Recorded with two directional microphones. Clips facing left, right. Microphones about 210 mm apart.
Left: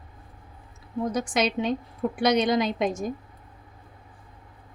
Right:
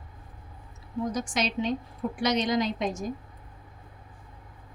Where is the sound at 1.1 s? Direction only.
55° left (ahead or behind).